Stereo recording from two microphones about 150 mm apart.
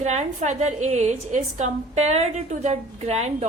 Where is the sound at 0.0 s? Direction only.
50° right (ahead or behind).